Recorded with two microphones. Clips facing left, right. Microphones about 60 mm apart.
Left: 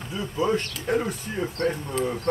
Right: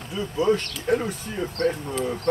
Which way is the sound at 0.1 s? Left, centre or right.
Centre.